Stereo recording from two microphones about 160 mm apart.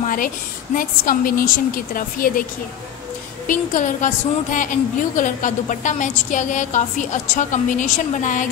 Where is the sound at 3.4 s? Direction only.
55° left (ahead or behind).